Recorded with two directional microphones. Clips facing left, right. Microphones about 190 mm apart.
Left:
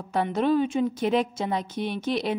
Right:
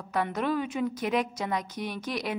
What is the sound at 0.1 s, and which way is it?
A woman's voice, 30° left (ahead or behind).